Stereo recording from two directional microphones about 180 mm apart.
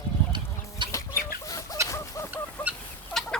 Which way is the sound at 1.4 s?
20° left (ahead or behind).